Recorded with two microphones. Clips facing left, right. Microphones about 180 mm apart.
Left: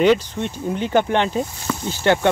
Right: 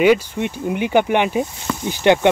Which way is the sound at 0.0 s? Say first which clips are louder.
Right 1 dB; 10° right (ahead or behind).